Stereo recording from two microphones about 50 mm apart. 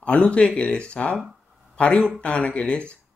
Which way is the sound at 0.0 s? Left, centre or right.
Left.